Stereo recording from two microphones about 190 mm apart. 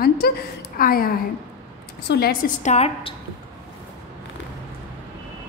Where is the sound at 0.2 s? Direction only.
55° left (ahead or behind).